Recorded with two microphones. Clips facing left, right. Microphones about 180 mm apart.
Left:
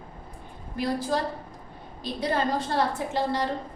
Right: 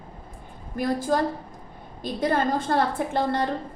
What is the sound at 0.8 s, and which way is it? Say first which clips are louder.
A woman's voice: right 3 dB; 50° right (ahead or behind).